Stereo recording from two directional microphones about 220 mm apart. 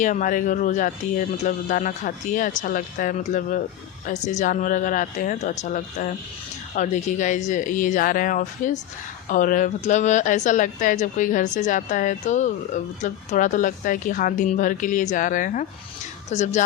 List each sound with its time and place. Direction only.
0.0 s speech: 35° left (ahead or behind)